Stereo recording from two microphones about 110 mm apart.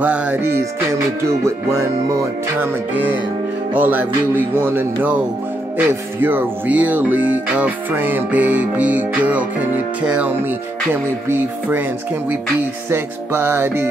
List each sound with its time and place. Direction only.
0.0 s music: 15° right (ahead or behind)
0.6 s music: 25° right (ahead or behind)
12.9 s music: 20° right (ahead or behind)